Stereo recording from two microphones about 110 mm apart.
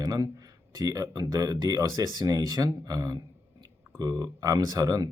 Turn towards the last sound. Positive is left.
turn(degrees=-35)  # may be behind; listen again after turning